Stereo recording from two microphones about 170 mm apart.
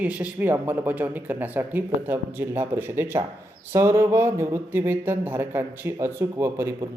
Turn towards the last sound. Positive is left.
turn(degrees=-15)  # may be behind; listen again after turning